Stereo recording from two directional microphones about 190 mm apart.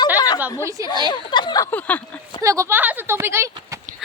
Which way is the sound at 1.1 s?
25° left (ahead or behind).